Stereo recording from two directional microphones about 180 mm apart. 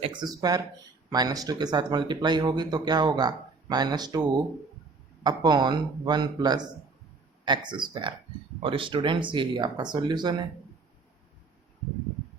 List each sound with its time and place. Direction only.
0.0 s speech: 25° right (ahead or behind)